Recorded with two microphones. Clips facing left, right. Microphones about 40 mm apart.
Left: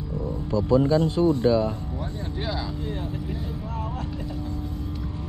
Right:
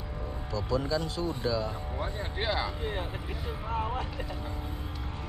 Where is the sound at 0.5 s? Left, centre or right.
Left.